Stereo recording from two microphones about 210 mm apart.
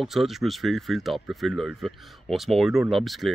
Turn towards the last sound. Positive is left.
turn(degrees=0)  # may be behind; listen again after turning